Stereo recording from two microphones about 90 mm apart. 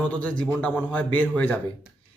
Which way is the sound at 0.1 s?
15° left (ahead or behind).